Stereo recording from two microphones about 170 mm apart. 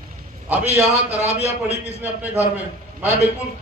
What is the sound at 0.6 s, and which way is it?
Speech, 40° right (ahead or behind).